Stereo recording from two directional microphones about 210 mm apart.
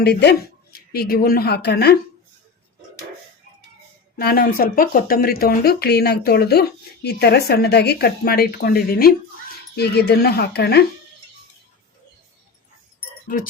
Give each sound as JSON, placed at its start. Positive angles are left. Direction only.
{"t": 0.0, "sound": "speech", "side_deg": 50}
{"t": 4.2, "sound": "speech", "side_deg": 45}
{"t": 13.2, "sound": "speech", "side_deg": 40}